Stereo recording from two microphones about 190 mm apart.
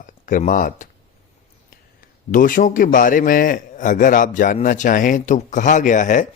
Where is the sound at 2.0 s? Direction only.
45° left (ahead or behind).